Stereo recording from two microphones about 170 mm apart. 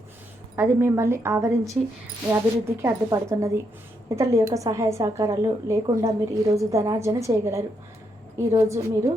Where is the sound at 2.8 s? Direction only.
15° right (ahead or behind).